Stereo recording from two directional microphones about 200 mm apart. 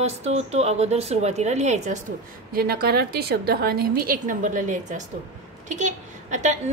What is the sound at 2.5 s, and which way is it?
A woman's voice, 50° right (ahead or behind).